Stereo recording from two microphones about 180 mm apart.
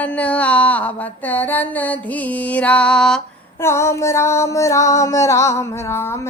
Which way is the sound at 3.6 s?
15° left (ahead or behind).